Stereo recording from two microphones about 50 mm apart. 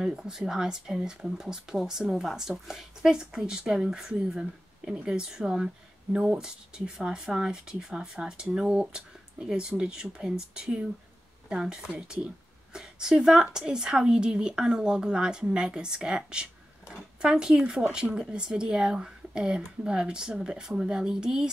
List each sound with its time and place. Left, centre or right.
0.0 s speech: centre